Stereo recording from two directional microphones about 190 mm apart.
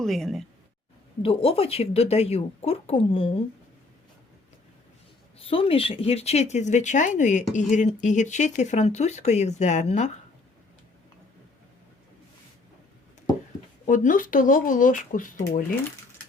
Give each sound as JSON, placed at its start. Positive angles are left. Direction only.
{"t": 0.0, "sound": "speech", "side_deg": 0}
{"t": 1.2, "sound": "speech", "side_deg": 30}
{"t": 5.4, "sound": "speech", "side_deg": 30}
{"t": 13.8, "sound": "speech", "side_deg": 45}